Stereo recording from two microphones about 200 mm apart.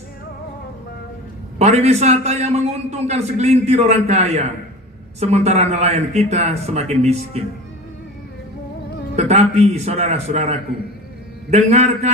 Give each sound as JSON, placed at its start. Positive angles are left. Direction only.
{"t": 1.6, "sound": "a man's voice", "side_deg": -30}
{"t": 9.1, "sound": "a man's voice", "side_deg": -35}